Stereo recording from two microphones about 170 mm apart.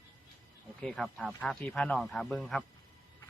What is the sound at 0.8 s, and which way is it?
Speech, 5° left (ahead or behind).